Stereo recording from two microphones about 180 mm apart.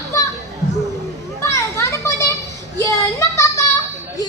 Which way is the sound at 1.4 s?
15° left (ahead or behind).